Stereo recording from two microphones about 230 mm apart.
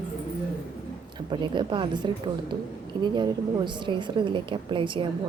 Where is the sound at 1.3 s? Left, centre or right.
Right.